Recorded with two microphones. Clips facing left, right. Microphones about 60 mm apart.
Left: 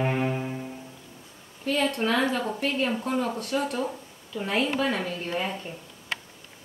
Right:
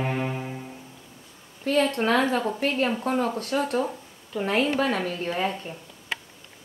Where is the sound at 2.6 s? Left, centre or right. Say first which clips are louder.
Right 2 dB; right.